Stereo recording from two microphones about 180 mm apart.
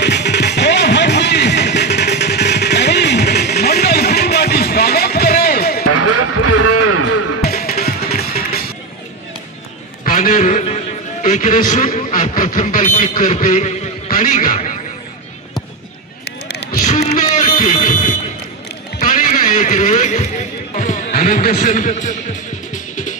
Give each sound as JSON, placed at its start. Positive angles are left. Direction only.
{"t": 0.0, "sound": "music", "side_deg": 70}
{"t": 7.4, "sound": "music", "side_deg": 55}
{"t": 10.0, "sound": "a sound", "side_deg": 45}
{"t": 11.2, "sound": "a man's voice", "side_deg": 45}
{"t": 16.4, "sound": "run", "side_deg": 65}
{"t": 16.8, "sound": "music", "side_deg": 40}